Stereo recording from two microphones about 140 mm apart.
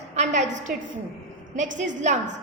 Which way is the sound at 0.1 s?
55° right (ahead or behind).